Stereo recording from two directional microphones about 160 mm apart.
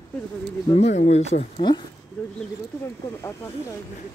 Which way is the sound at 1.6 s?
30° left (ahead or behind).